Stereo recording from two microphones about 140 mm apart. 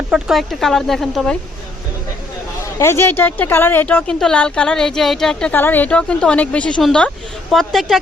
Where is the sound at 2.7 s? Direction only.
20° left (ahead or behind).